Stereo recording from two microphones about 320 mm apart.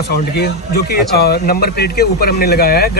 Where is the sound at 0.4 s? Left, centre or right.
Left.